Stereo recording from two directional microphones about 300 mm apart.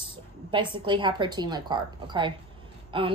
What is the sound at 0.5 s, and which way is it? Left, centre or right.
Speech, centre.